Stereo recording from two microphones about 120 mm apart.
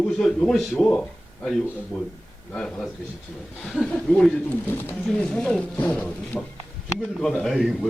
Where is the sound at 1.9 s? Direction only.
Centre (ahead or behind).